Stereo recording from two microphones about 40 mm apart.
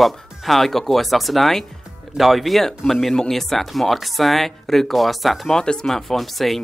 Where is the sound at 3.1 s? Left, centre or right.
Centre.